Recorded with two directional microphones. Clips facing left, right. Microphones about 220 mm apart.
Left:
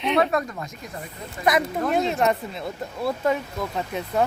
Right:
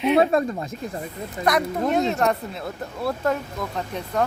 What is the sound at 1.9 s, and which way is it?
A woman's voice, centre (ahead or behind).